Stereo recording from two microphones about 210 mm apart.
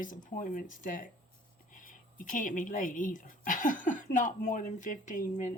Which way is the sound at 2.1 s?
40° left (ahead or behind).